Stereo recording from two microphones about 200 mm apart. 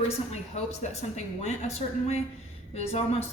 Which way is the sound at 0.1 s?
35° left (ahead or behind).